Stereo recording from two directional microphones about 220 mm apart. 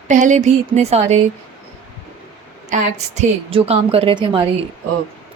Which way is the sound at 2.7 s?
30° right (ahead or behind).